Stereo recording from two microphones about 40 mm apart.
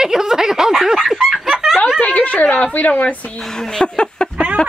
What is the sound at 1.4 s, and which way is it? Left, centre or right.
Snicker, centre.